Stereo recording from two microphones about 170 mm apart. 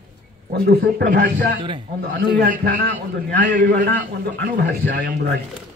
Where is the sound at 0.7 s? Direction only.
70° right (ahead or behind).